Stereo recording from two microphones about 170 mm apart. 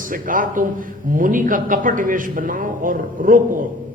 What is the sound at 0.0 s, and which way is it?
A man's voice, 55° right (ahead or behind).